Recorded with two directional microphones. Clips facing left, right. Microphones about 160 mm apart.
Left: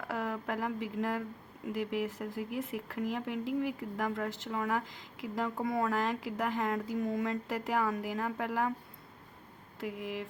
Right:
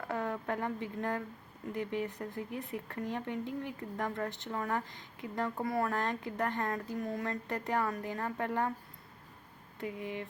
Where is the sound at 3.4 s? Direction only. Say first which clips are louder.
Left 6 dB; 90° left.